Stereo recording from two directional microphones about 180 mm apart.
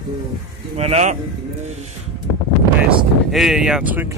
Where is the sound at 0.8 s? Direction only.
35° right (ahead or behind).